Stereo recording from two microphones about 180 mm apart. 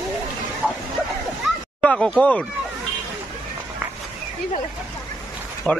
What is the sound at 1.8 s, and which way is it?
Speech, 5° left (ahead or behind).